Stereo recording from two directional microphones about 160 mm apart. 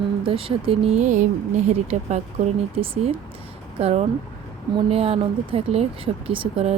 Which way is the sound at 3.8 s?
45° right (ahead or behind).